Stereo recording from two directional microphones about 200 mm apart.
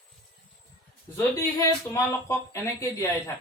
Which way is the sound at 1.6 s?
15° left (ahead or behind).